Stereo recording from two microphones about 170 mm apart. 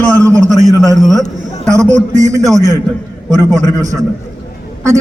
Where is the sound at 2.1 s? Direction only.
45° right (ahead or behind).